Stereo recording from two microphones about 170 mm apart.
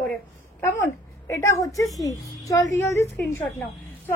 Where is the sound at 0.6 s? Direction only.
15° left (ahead or behind).